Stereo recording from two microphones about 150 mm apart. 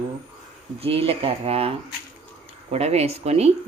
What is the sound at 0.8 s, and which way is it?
Speech, 40° right (ahead or behind).